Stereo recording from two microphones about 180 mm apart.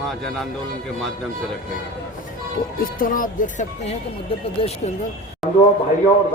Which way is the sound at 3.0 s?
50° left (ahead or behind).